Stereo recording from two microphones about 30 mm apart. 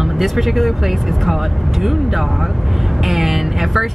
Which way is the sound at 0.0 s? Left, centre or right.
Centre.